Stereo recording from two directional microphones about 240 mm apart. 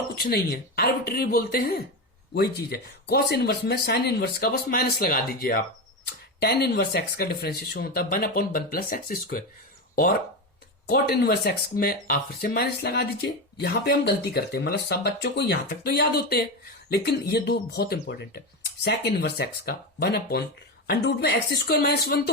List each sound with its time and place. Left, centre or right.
0.2 s speech: left
10.8 s speech: left